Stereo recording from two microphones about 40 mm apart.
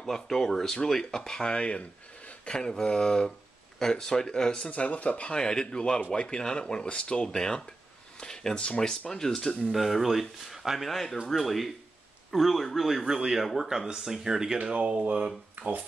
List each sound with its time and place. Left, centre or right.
0.0 s speech: centre
1.4 s speech: left
2.4 s speech: centre
4.6 s speech: left; by 7.6 s centre
8.2 s a sound: centre
8.5 s speech: left
9.7 s speech: centre
13.0 s speech: centre
13.4 s speech: centre
14.6 s speech: right
15.6 s speech: right